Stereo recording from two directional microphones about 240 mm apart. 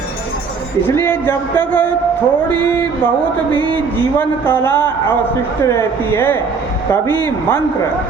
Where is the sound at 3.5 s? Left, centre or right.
Centre.